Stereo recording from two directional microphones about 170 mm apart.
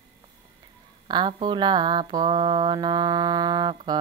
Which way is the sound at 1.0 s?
25° right (ahead or behind).